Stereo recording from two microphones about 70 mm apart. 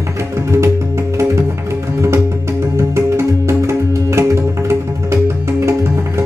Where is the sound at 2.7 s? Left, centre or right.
Right.